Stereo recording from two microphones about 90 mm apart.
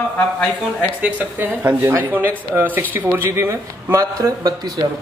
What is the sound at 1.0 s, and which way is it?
Speech, 20° right (ahead or behind).